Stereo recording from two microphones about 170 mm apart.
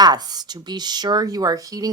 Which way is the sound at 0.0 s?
25° right (ahead or behind).